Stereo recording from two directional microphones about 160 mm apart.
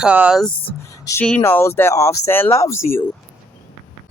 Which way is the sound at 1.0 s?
20° left (ahead or behind).